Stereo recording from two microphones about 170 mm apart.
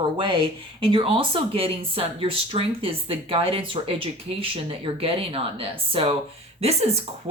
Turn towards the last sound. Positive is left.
turn(degrees=-40)  # may be behind; listen again after turning